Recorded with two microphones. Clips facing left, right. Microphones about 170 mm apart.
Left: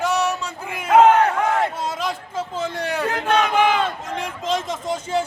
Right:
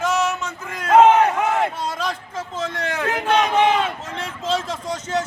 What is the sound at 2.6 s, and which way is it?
Speech, 15° left (ahead or behind).